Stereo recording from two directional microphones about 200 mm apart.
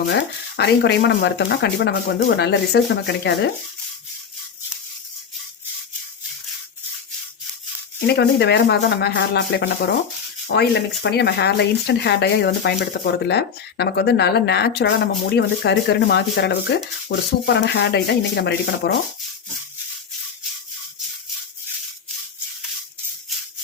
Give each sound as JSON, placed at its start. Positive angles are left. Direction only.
{"t": 0.1, "sound": "speech", "side_deg": 60}
{"t": 8.0, "sound": "speech", "side_deg": 55}